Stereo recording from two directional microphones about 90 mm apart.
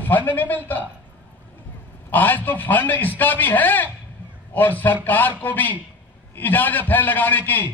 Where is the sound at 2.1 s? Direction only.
20° left (ahead or behind).